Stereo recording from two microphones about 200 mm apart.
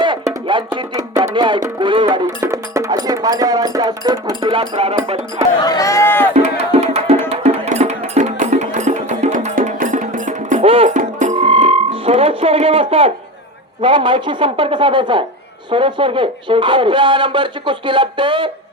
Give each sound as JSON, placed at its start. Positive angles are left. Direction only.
{"t": 0.0, "sound": "music", "side_deg": -25}
{"t": 2.2, "sound": "speech", "side_deg": -15}
{"t": 4.9, "sound": "music", "side_deg": -30}
{"t": 5.6, "sound": "speech", "side_deg": 15}
{"t": 6.3, "sound": "music", "side_deg": -30}
{"t": 13.8, "sound": "a man's voice", "side_deg": -25}